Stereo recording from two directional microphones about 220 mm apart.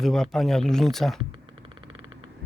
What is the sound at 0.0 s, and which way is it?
Speech, centre (ahead or behind).